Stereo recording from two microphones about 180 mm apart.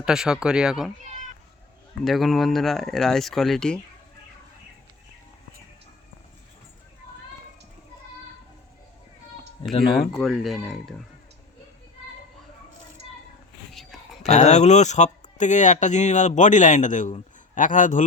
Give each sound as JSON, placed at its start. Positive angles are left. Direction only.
{"t": 0.0, "sound": "speech", "side_deg": -5}
{"t": 2.0, "sound": "speech", "side_deg": 0}
{"t": 9.7, "sound": "speech", "side_deg": 25}
{"t": 10.2, "sound": "speech", "side_deg": 0}
{"t": 13.9, "sound": "whispering", "side_deg": 0}
{"t": 14.3, "sound": "speech", "side_deg": 40}